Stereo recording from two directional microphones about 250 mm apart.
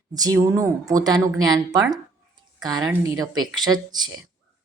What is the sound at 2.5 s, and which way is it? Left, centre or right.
A woman's voice, centre.